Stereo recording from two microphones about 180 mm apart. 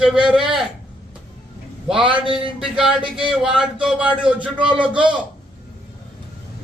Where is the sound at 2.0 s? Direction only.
25° right (ahead or behind).